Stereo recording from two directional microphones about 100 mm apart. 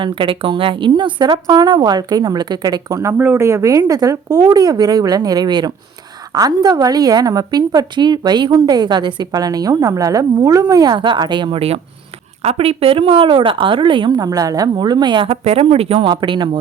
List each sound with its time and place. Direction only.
0.0 s a woman's voice: 55° right (ahead or behind)
12.4 s a woman's voice: 80° right; by 14.1 s 60° right (ahead or behind)
14.2 s a woman's voice: 40° right (ahead or behind)
15.3 s speech: 85° right
16.0 s a woman's voice: 50° right (ahead or behind)